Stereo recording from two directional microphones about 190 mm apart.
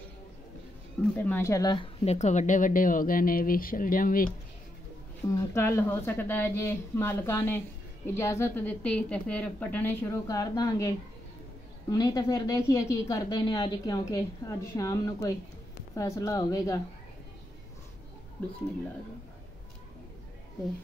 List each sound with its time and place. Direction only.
1.1 s a woman's voice: 10° left (ahead or behind); by 4.3 s 45° left (ahead or behind)
5.3 s a woman's voice: 15° left (ahead or behind)
11.9 s a woman's voice: 20° left (ahead or behind)